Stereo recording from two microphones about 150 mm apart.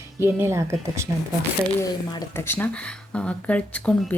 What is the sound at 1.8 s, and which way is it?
Speech, 20° left (ahead or behind).